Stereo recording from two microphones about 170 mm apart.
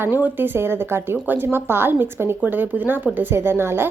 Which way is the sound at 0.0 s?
10° right (ahead or behind).